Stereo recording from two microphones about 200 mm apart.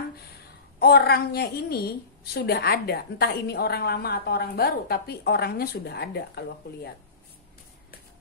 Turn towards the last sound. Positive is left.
turn(degrees=55)  # may be behind; listen again after turning